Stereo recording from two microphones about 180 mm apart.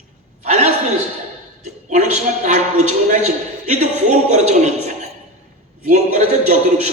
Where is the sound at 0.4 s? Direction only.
40° right (ahead or behind).